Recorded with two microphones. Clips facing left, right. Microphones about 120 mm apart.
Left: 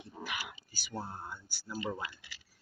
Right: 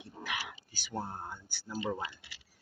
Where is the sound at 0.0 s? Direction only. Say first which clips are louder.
Right 1 dB; 55° right (ahead or behind).